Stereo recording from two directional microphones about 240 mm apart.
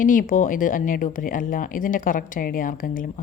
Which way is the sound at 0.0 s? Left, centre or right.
Left.